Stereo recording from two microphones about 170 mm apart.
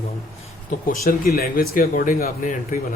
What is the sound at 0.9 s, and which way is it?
Speech, 60° left (ahead or behind).